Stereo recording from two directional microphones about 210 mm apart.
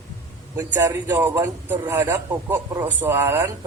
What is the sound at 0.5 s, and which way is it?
A man's voice, 10° right (ahead or behind).